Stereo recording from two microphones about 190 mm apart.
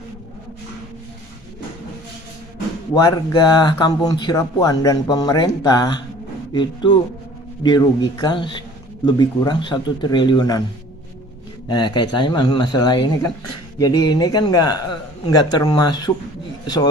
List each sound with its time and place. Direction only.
2.9 s speech: 20° left (ahead or behind)
11.7 s speech: 25° left (ahead or behind)